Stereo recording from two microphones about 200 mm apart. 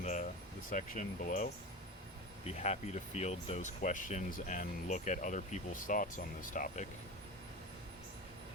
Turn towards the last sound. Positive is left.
turn(degrees=40)  # may be behind; listen again after turning